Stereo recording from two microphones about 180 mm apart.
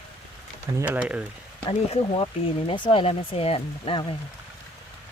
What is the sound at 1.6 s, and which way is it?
Speech, 35° left (ahead or behind).